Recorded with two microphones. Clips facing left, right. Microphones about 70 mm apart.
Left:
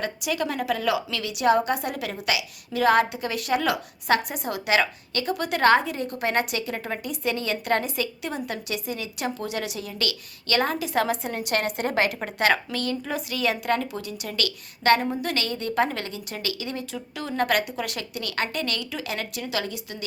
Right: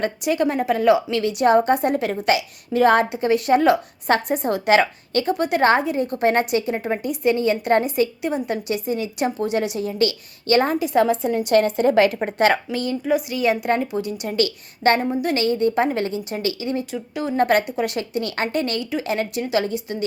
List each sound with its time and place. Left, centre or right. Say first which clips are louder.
0.0 s a woman's voice: right 7 dB; right
12.2 s a woman's voice: right 5 dB; right